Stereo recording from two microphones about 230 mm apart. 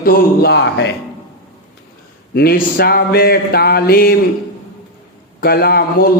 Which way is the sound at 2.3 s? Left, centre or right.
Left.